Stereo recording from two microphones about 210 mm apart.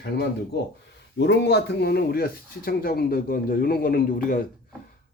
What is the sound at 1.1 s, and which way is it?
Speech, 55° left (ahead or behind).